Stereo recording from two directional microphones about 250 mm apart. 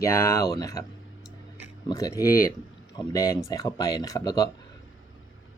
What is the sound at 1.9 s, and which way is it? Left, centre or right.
Speech, centre.